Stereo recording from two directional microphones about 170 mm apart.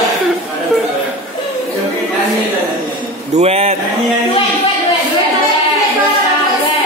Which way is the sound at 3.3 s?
35° right (ahead or behind).